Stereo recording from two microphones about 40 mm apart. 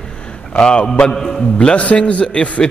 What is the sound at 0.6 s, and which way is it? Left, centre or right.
A man's voice, left.